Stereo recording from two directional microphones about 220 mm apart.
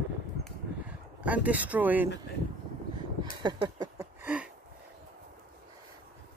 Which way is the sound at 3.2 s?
20° right (ahead or behind).